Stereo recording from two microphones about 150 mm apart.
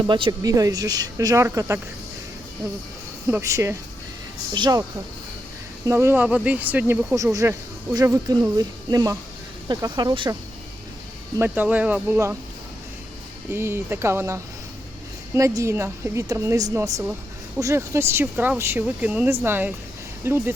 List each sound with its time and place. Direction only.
0.0 s speech: 30° right (ahead or behind)
3.2 s speech: 20° right (ahead or behind)
4.5 s speech: 30° right (ahead or behind)
5.8 s speech: 15° right (ahead or behind)
11.3 s speech: 10° right (ahead or behind)
13.5 s speech: 15° right (ahead or behind)